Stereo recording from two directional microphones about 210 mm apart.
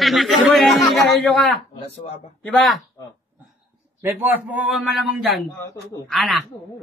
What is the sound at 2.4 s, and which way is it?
Speech, 5° left (ahead or behind).